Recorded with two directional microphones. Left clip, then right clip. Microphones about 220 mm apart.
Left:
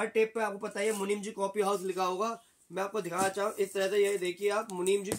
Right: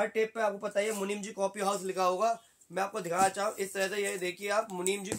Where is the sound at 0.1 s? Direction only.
10° right (ahead or behind).